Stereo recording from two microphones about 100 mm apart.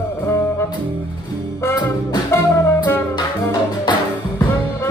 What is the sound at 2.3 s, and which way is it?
Music, 25° left (ahead or behind).